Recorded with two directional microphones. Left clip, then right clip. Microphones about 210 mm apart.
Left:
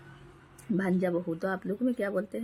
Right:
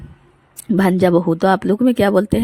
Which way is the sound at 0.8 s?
40° right (ahead or behind).